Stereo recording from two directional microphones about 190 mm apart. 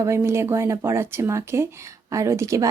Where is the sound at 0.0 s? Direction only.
15° right (ahead or behind).